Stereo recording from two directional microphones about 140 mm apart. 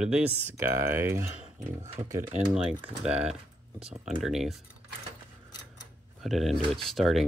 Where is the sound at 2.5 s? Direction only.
5° right (ahead or behind).